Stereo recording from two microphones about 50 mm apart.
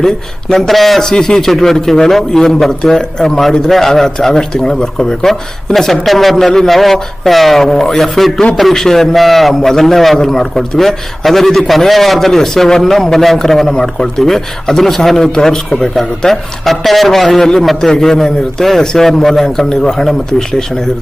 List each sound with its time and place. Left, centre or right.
0.0 s a man's voice: centre